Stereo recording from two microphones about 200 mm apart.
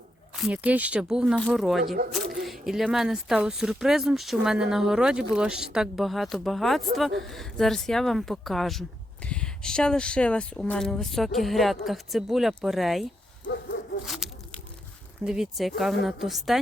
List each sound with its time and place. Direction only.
0.3 s speech: 5° right (ahead or behind)
14.0 s tearing: centre (ahead or behind)
15.2 s speech: 5° right (ahead or behind)